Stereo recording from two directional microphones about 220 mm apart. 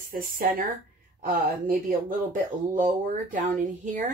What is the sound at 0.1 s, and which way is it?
Speech, 40° right (ahead or behind).